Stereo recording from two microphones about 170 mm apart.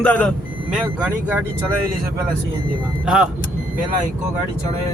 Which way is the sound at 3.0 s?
5° right (ahead or behind).